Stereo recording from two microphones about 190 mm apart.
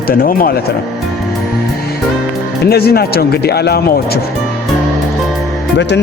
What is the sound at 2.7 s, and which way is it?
Speech, 55° left (ahead or behind).